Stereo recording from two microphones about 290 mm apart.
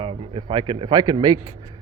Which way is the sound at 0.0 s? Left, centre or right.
Centre.